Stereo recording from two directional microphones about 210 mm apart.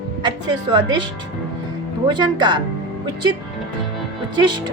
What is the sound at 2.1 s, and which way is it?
Speech, 20° right (ahead or behind).